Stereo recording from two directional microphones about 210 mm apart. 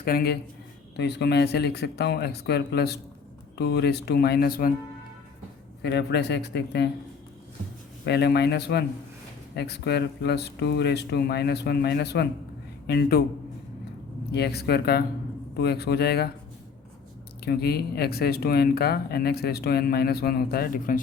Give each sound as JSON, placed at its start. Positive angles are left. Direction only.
{"t": 0.0, "sound": "speech", "side_deg": 45}
{"t": 5.8, "sound": "speech", "side_deg": 55}
{"t": 8.0, "sound": "speech", "side_deg": 50}
{"t": 14.3, "sound": "speech", "side_deg": 50}
{"t": 17.4, "sound": "speech", "side_deg": 50}